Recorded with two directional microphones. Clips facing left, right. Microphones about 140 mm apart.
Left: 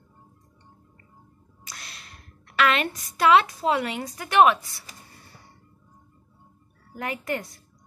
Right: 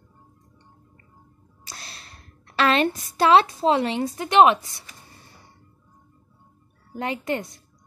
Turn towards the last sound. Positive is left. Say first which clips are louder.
# right 3 dB
turn(degrees=-20)  # may be behind; listen again after turning